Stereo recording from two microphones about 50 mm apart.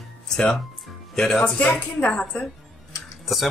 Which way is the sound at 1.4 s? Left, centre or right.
Left.